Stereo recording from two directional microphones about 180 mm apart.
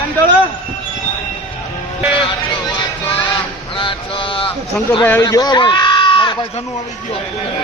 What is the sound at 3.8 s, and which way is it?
Mantra, 25° left (ahead or behind).